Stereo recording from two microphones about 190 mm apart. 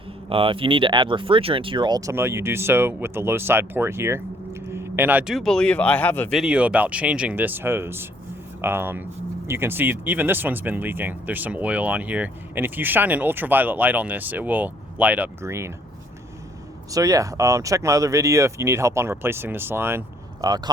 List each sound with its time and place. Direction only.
0.3 s speech: 30° right (ahead or behind); by 6.4 s 10° left (ahead or behind)
6.4 s speech: 5° right (ahead or behind)
16.9 s speech: 15° right (ahead or behind)